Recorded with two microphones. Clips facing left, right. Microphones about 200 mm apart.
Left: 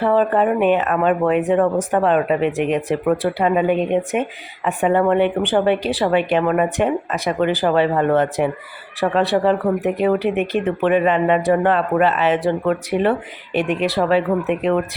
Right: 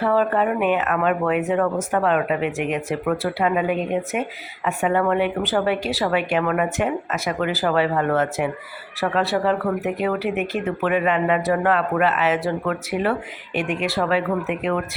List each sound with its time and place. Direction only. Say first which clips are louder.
0.0 s speech: left 3 dB; 25° left (ahead or behind)